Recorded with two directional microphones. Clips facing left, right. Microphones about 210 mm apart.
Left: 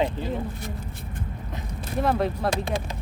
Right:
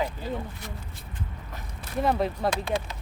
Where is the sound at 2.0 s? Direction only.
Centre (ahead or behind).